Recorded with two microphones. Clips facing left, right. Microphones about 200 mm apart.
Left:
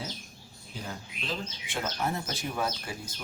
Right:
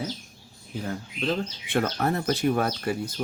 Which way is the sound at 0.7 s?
55° right (ahead or behind).